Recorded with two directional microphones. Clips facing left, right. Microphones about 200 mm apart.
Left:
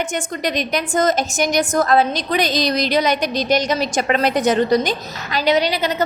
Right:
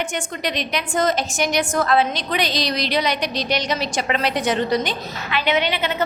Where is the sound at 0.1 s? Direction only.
45° left (ahead or behind).